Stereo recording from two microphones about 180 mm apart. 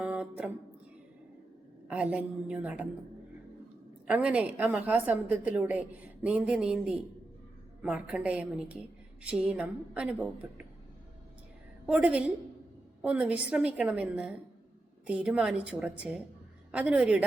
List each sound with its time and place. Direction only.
0.0 s music: 5° right (ahead or behind)
1.9 s a woman's voice: 10° right (ahead or behind)
4.0 s a woman's voice: 5° right (ahead or behind)
11.9 s a woman's voice: 5° right (ahead or behind)